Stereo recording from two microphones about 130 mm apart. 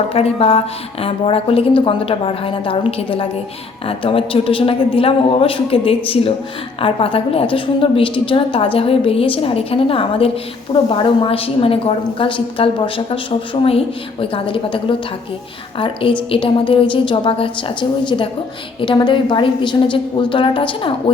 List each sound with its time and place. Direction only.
0.1 s a woman's voice: 50° left (ahead or behind)